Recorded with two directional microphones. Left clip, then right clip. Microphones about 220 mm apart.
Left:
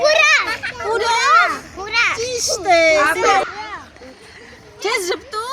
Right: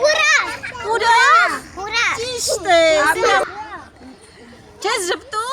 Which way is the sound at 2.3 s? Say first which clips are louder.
Even; 15° right (ahead or behind).